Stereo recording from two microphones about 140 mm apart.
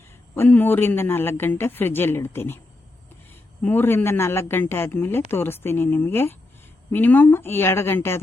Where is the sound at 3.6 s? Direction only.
15° left (ahead or behind).